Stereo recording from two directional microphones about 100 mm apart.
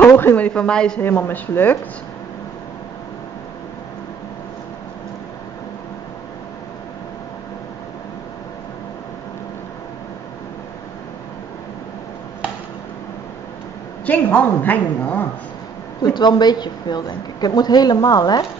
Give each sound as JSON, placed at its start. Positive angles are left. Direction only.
{"t": 0.0, "sound": "a sound", "side_deg": 20}
{"t": 0.5, "sound": "a woman's voice", "side_deg": 10}
{"t": 1.0, "sound": "speech", "side_deg": 20}
{"t": 14.0, "sound": "a woman's voice", "side_deg": 15}
{"t": 16.0, "sound": "a woman's voice", "side_deg": 45}